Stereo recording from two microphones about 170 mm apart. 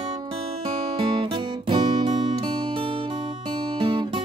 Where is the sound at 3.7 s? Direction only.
30° right (ahead or behind).